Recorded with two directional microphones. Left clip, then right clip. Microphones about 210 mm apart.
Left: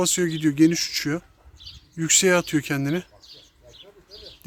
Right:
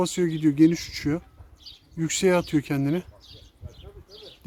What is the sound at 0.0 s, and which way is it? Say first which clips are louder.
Speech: left 1 dB; 10° right (ahead or behind).